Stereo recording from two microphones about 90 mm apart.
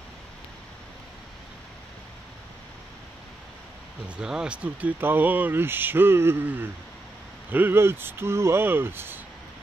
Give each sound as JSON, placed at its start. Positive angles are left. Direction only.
{"t": 4.2, "sound": "speech", "side_deg": -10}